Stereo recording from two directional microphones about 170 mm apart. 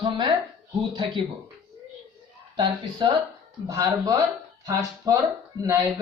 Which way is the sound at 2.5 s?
30° right (ahead or behind).